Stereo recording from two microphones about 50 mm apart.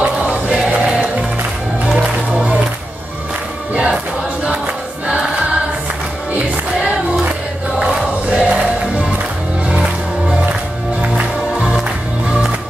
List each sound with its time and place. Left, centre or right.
0.0 s music: right
3.7 s music: centre
7.8 s choir: right
11.0 s music: right